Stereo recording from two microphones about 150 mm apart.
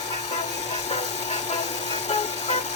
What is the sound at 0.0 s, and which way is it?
Music, 50° left (ahead or behind).